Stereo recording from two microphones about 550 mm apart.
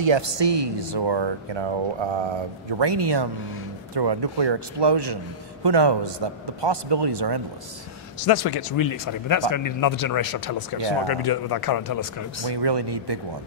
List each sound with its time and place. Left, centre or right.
0.0 s a man's voice: right
2.8 s a man's voice: right
8.2 s speech: left
12.4 s a man's voice: right